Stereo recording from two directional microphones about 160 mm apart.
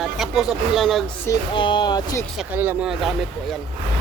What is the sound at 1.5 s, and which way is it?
Speech, 30° left (ahead or behind).